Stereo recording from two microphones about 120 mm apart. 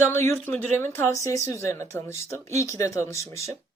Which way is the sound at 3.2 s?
65° right (ahead or behind).